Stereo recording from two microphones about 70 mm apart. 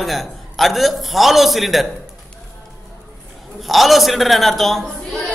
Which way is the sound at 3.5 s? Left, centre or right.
Centre.